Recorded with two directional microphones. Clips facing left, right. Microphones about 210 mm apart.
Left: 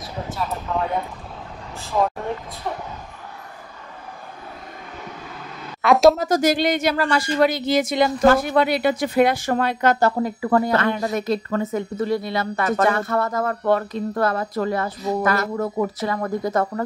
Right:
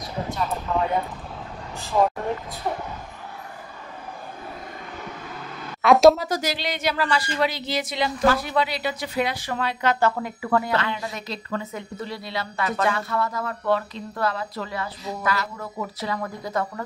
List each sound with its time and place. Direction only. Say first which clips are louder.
0.3 s speech: even; centre (ahead or behind)
5.8 s a woman's voice: even; centre (ahead or behind)
6.1 s speech: left 8 dB; 45° left (ahead or behind)